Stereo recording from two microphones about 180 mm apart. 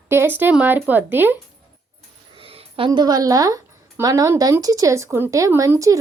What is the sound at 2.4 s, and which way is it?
Speech, 30° right (ahead or behind).